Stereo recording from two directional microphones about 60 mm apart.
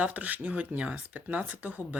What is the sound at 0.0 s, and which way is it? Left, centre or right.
Speech, right.